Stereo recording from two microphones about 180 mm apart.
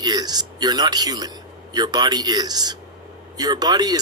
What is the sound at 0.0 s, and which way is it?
Speech, 20° right (ahead or behind).